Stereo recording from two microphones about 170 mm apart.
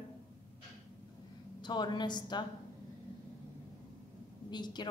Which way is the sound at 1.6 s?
25° left (ahead or behind).